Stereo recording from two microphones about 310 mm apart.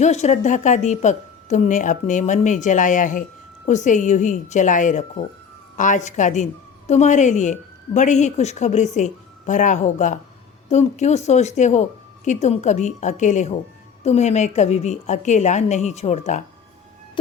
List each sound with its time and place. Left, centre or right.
0.0 s a woman's voice: left